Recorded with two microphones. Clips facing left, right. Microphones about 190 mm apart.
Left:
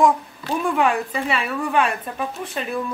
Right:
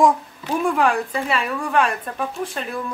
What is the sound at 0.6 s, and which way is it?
A woman's voice, centre (ahead or behind).